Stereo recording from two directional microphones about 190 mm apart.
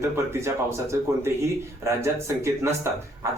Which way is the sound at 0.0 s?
15° right (ahead or behind).